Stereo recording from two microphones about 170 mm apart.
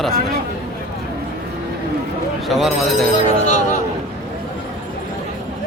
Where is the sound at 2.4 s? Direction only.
Centre (ahead or behind).